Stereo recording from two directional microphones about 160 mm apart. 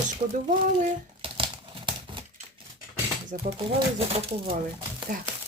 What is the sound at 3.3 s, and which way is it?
Speech, 55° right (ahead or behind).